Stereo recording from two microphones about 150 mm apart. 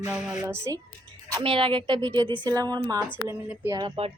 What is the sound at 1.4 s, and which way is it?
A woman's voice, 35° right (ahead or behind).